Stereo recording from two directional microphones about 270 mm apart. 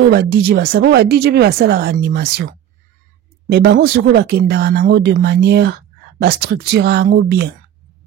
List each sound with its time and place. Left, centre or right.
0.1 s speech: right
3.4 s speech: right